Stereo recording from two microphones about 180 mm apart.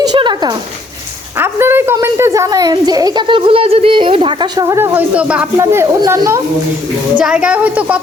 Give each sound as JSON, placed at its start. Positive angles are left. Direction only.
{"t": 0.0, "sound": "a sound", "side_deg": -25}
{"t": 1.4, "sound": "a child's voice", "side_deg": -15}
{"t": 7.2, "sound": "a woman's voice", "side_deg": -5}